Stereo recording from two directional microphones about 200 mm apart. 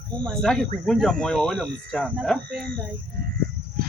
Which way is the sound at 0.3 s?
5° left (ahead or behind).